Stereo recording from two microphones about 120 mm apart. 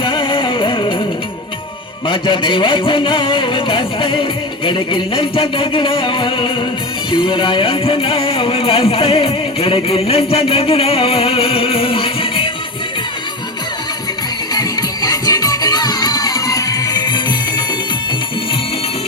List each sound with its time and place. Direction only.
0.0 s music: 45° left (ahead or behind)
2.0 s music: 40° left (ahead or behind)
14.5 s music: 30° left (ahead or behind)